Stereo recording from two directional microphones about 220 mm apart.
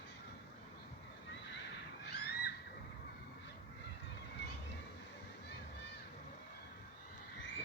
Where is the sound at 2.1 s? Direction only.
50° left (ahead or behind).